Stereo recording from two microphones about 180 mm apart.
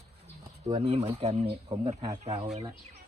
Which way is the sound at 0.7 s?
30° right (ahead or behind).